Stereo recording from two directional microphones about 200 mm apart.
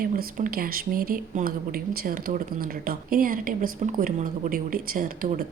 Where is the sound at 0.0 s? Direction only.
45° right (ahead or behind).